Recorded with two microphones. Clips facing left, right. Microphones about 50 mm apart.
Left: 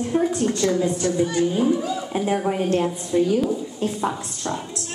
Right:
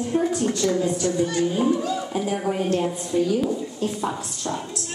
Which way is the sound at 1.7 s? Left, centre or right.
Centre.